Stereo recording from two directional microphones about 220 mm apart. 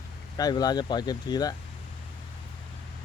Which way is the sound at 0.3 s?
15° left (ahead or behind).